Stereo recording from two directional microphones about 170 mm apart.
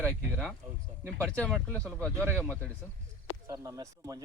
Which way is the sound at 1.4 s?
5° left (ahead or behind).